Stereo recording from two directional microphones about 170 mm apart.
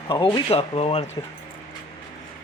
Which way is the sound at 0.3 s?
30° left (ahead or behind).